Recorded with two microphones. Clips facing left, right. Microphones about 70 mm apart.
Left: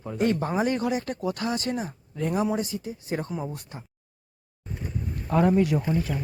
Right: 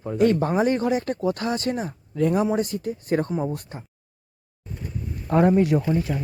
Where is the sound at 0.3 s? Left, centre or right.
Right.